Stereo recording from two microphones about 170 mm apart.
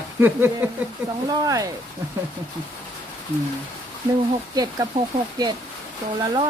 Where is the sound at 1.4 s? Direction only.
20° right (ahead or behind).